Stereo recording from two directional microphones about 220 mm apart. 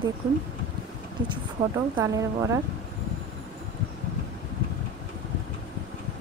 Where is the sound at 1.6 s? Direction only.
20° right (ahead or behind).